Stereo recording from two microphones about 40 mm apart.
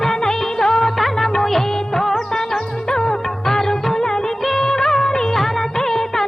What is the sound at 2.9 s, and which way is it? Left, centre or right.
Music, centre.